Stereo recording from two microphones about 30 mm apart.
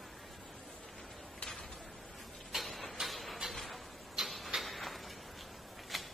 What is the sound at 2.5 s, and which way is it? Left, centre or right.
Tick-tock, centre.